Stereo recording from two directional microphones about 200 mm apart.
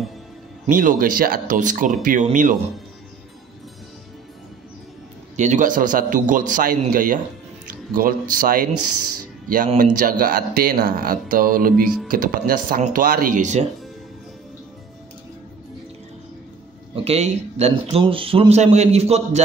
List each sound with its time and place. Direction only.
0.7 s speech: 45° right (ahead or behind)
5.3 s speech: 35° right (ahead or behind)
9.8 s speech: 45° right (ahead or behind)
11.7 s speech: 5° left (ahead or behind)
12.1 s speech: 45° right (ahead or behind)
16.9 s speech: 30° right (ahead or behind)